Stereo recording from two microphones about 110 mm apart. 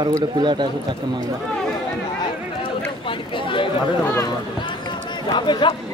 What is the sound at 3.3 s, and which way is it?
Chatter, 50° left (ahead or behind).